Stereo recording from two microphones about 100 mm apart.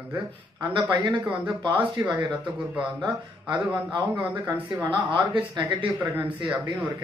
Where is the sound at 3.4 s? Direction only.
55° right (ahead or behind).